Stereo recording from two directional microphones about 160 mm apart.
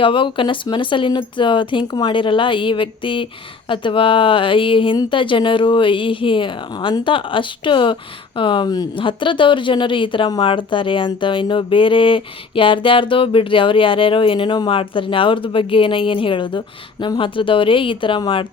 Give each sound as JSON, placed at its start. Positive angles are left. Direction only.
{"t": 0.0, "sound": "speech", "side_deg": 30}